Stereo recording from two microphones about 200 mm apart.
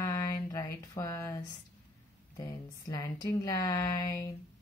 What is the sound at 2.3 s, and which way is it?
A woman's voice, 15° left (ahead or behind).